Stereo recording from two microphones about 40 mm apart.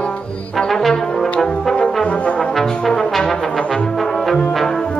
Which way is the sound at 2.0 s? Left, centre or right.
Left.